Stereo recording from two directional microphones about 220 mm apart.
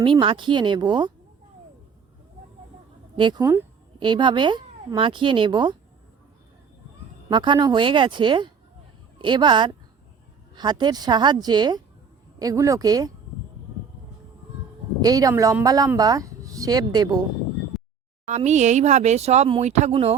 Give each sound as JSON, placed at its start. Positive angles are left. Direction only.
{"t": 0.0, "sound": "speech", "side_deg": -20}
{"t": 3.2, "sound": "speech", "side_deg": -20}
{"t": 7.3, "sound": "speech", "side_deg": -20}
{"t": 15.0, "sound": "speech", "side_deg": -15}
{"t": 17.7, "sound": "a sound", "side_deg": 0}
{"t": 18.3, "sound": "speech", "side_deg": -30}